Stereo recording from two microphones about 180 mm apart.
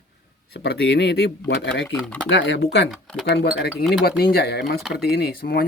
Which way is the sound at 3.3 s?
60° left (ahead or behind).